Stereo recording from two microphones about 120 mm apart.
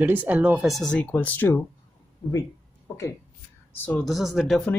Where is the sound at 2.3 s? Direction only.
30° left (ahead or behind).